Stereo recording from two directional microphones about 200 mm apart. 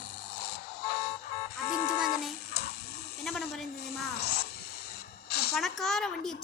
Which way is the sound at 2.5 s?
55° left (ahead or behind).